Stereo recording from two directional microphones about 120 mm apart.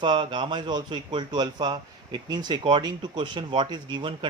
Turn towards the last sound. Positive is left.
turn(degrees=-45)  # may be behind; listen again after turning